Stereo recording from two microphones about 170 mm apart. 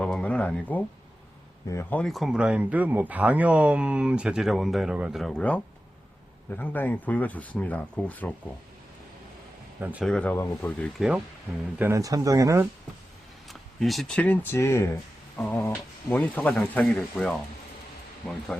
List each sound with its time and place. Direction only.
0.0 s a sound: 5° left (ahead or behind)
1.6 s speech: 15° left (ahead or behind)
9.8 s speech: 10° right (ahead or behind)
10.1 s speech: 10° left (ahead or behind)
11.8 s speech: 15° right (ahead or behind)
13.5 s speech: centre (ahead or behind)